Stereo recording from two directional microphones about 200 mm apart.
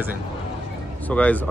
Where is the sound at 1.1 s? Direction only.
5° left (ahead or behind).